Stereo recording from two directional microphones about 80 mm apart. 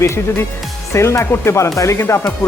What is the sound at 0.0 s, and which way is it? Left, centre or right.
Speech, left.